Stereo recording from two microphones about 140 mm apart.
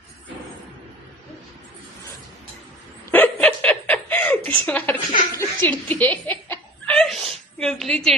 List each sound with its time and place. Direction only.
3.1 s chuckle: 10° left (ahead or behind)
5.4 s snicker: 15° left (ahead or behind)
7.6 s a woman's voice: 5° left (ahead or behind)